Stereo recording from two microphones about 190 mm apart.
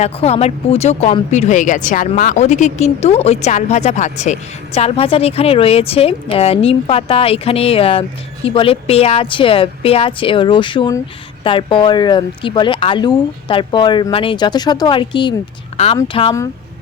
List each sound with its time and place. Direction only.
0.0 s speech: 35° left (ahead or behind)